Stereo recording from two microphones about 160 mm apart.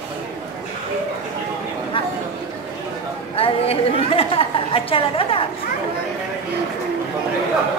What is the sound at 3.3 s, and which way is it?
A woman's voice, 35° left (ahead or behind).